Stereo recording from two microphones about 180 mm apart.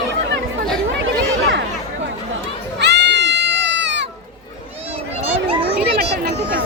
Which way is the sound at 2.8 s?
70° right (ahead or behind).